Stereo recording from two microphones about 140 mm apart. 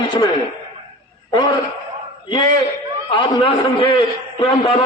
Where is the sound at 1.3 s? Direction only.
30° left (ahead or behind).